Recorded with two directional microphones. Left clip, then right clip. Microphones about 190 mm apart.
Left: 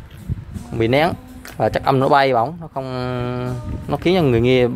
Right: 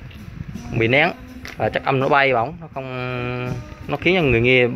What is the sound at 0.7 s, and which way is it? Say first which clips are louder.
Speech: even; 25° left (ahead or behind).